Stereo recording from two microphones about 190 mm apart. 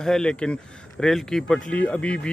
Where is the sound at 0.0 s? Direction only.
5° left (ahead or behind).